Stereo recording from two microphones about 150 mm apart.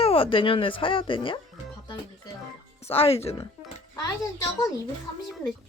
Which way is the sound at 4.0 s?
20° left (ahead or behind).